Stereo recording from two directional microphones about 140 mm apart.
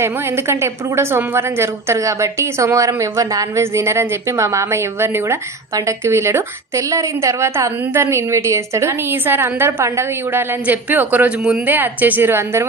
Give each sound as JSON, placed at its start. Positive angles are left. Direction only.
{"t": 0.0, "sound": "a woman's voice", "side_deg": -15}